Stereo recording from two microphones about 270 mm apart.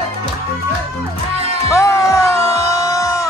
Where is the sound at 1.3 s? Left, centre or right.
Right.